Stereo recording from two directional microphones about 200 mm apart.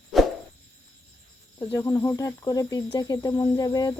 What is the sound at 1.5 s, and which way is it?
Speech, 15° left (ahead or behind).